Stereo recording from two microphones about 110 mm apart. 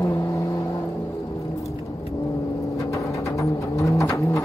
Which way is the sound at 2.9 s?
30° left (ahead or behind).